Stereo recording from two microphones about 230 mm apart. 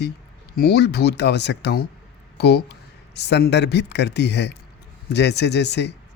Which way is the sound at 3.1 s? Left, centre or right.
Left.